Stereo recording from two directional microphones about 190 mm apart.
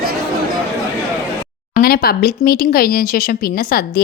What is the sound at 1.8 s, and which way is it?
Speech, 50° left (ahead or behind).